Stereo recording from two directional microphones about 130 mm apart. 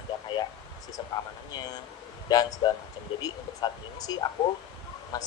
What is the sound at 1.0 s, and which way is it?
Speech, 35° left (ahead or behind).